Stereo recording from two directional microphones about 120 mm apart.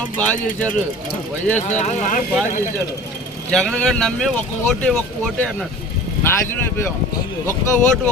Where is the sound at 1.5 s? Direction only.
80° left.